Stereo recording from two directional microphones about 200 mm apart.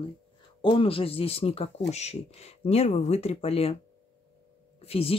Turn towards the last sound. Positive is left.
turn(degrees=30)  # may be behind; listen again after turning